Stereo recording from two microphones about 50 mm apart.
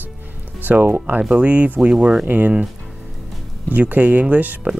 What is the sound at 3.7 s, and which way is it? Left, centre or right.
Speech, right.